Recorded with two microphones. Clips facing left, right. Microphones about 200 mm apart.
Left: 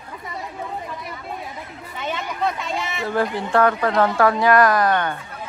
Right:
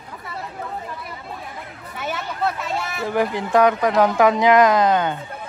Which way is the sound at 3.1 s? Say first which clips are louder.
Right 1 dB; 15° right (ahead or behind).